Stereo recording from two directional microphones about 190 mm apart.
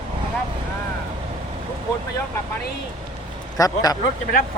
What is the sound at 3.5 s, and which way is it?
Speech, 20° left (ahead or behind).